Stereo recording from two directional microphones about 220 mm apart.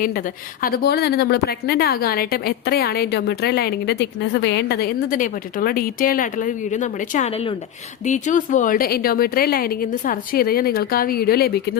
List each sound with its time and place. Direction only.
0.0 s a woman's voice: 40° left (ahead or behind)